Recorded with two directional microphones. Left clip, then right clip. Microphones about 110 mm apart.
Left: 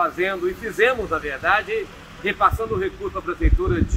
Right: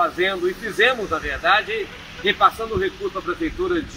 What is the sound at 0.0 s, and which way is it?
Speech, 20° right (ahead or behind).